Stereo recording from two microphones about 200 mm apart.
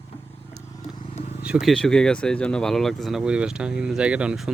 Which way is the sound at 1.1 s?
35° left (ahead or behind).